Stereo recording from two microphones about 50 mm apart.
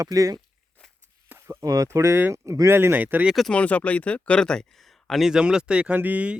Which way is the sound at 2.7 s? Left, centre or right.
Right.